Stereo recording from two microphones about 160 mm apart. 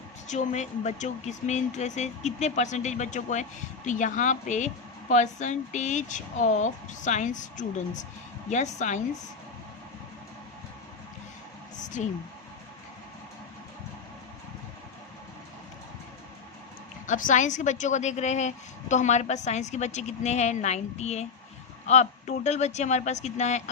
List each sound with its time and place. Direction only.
0.3 s speech: 50° left (ahead or behind)
11.8 s a sound: 50° left (ahead or behind)
17.1 s speech: 55° left (ahead or behind)